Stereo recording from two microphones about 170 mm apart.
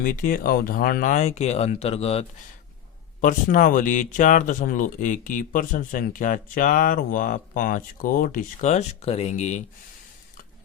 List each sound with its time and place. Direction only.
0.0 s speech: 55° left (ahead or behind); by 2.2 s 35° left (ahead or behind)
3.2 s speech: 50° left (ahead or behind)